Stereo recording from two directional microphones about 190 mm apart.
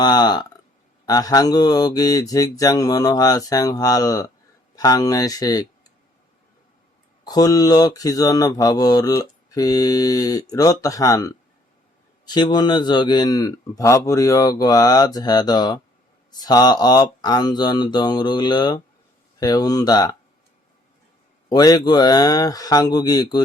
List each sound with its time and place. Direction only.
0.0 s speech: 20° left (ahead or behind)
7.3 s speech: 20° left (ahead or behind)
21.5 s speech: 20° left (ahead or behind)